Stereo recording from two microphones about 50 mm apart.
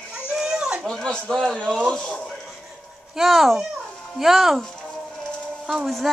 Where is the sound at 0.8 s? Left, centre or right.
Centre.